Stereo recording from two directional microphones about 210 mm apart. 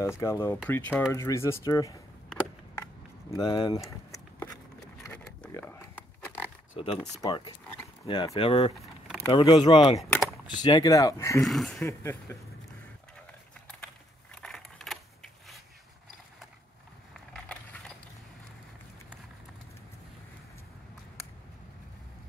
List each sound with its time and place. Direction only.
0.2 s speech: 15° left (ahead or behind)
3.3 s speech: 20° left (ahead or behind)
5.0 s pig: 5° left (ahead or behind)
6.7 s speech: 30° left (ahead or behind)
8.7 s keys jangling: centre (ahead or behind)
9.3 s speech: 25° left (ahead or behind)
11.4 s speech: centre (ahead or behind)
12.0 s speech: 10° left (ahead or behind)
14.3 s a sound: centre (ahead or behind)
17.1 s a sound: 5° left (ahead or behind)